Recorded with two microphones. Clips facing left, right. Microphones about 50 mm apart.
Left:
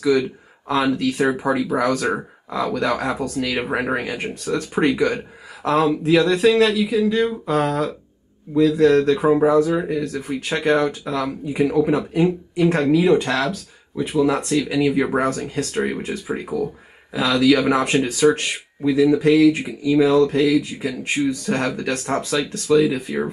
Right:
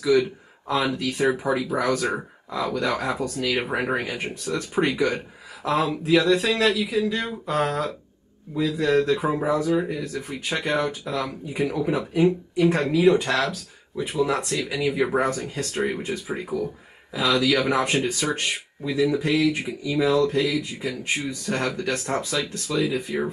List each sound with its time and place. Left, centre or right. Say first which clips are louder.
0.0 s speech: left 2 dB; centre